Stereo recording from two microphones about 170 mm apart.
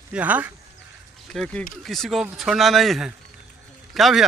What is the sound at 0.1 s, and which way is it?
Speech, 10° right (ahead or behind).